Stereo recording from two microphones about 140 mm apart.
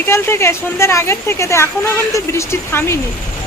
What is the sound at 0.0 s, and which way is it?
Speech, 15° left (ahead or behind).